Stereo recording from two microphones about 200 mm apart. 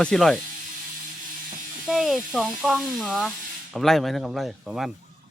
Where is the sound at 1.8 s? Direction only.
Centre (ahead or behind).